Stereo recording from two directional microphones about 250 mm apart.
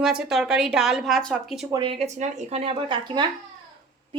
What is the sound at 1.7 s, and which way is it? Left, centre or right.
Speech, centre.